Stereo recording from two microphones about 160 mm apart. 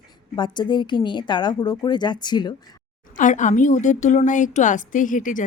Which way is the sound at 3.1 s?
50° left (ahead or behind).